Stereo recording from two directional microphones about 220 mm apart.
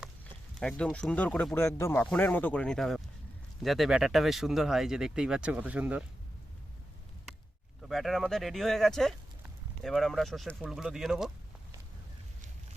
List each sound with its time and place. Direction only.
0.6 s speech: 5° left (ahead or behind)
7.8 s speech: centre (ahead or behind)